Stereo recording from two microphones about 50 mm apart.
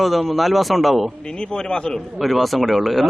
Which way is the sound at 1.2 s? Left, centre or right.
Centre.